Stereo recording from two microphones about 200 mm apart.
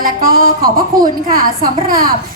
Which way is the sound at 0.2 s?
45° right (ahead or behind).